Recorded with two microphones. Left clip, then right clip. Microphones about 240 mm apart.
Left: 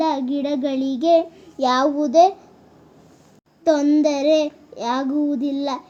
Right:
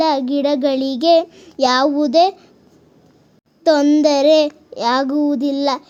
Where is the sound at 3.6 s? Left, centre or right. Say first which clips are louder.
Right 4 dB; right.